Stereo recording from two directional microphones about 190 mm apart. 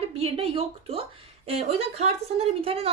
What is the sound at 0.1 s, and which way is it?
A woman's voice, 30° right (ahead or behind).